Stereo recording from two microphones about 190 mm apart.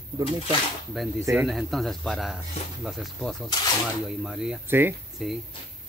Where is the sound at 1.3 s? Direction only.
Centre (ahead or behind).